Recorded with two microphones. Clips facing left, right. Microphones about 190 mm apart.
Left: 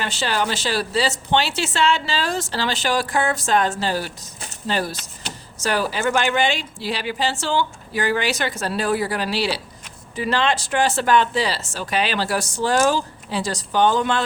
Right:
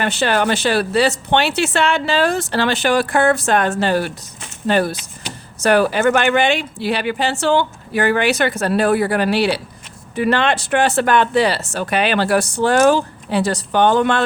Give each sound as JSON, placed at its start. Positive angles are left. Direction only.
{"t": 0.0, "sound": "speech", "side_deg": -60}